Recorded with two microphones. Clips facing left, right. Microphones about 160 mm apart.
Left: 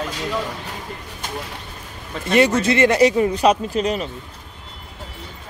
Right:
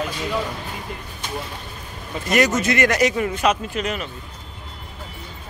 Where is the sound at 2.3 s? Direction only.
30° left (ahead or behind).